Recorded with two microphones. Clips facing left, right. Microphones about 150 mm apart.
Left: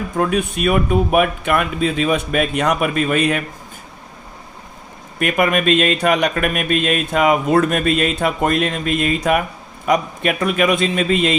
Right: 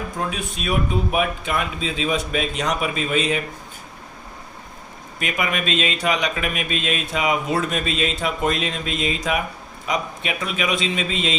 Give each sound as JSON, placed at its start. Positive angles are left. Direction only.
{"t": 0.2, "sound": "speech", "side_deg": 55}
{"t": 5.2, "sound": "speech", "side_deg": 50}